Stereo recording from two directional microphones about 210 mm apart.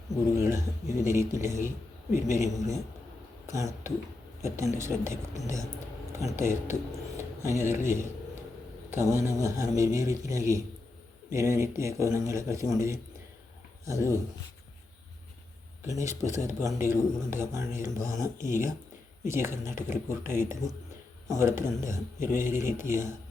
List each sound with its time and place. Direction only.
0.3 s speech: 15° right (ahead or behind)
8.9 s speech: 15° right (ahead or behind)
15.8 s speech: 15° right (ahead or behind)
16.0 s speech: 35° left (ahead or behind)
16.4 s speech: 15° right (ahead or behind)